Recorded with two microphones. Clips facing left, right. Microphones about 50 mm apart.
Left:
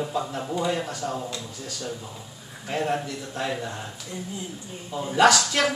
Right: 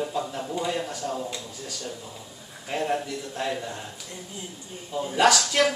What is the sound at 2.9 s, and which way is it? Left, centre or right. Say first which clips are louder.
Speech: even; centre.